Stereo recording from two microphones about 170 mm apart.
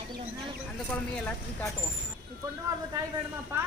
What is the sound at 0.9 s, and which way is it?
Speech, 10° left (ahead or behind).